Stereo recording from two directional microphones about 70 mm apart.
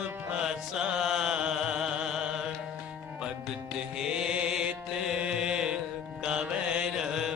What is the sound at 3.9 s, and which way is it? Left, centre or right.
Music, centre.